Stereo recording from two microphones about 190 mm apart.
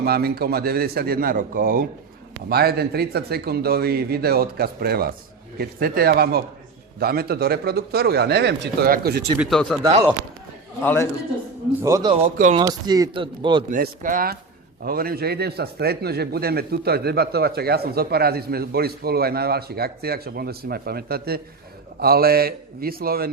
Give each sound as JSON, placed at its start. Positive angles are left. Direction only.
{"t": 0.0, "sound": "a man's voice", "side_deg": -55}
{"t": 9.4, "sound": "speech", "side_deg": 5}
{"t": 10.8, "sound": "a man's voice", "side_deg": 15}
{"t": 11.8, "sound": "a man's voice", "side_deg": -15}
{"t": 13.7, "sound": "a man's voice", "side_deg": -45}